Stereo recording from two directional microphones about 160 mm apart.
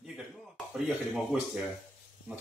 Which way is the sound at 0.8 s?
5° right (ahead or behind).